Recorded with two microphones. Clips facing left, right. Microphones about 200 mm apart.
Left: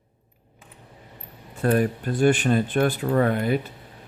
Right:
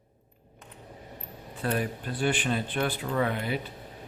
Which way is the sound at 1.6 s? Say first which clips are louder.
Left 8 dB; 50° left (ahead or behind).